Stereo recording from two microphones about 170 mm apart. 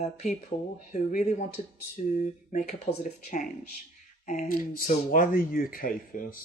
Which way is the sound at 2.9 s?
35° left (ahead or behind).